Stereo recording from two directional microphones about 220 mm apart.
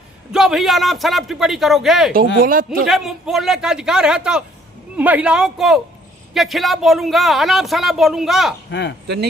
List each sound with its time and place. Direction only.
0.3 s a man's voice: centre (ahead or behind)
2.4 s speech: 40° right (ahead or behind)
2.8 s a man's voice: centre (ahead or behind)
8.7 s speech: 50° left (ahead or behind)